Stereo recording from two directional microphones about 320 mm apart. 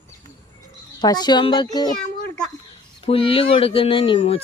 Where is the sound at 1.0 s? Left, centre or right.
Centre.